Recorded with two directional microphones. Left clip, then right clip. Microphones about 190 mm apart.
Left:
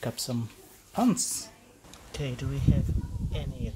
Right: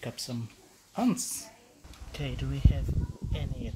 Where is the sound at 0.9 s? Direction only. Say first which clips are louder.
Left 3 dB; 15° left (ahead or behind).